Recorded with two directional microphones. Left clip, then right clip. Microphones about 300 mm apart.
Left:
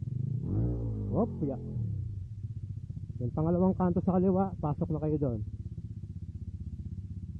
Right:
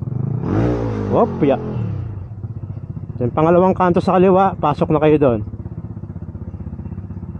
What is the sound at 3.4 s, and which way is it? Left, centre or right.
Speech, centre.